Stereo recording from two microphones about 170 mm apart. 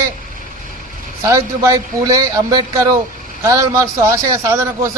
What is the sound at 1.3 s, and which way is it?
Speech, 20° right (ahead or behind).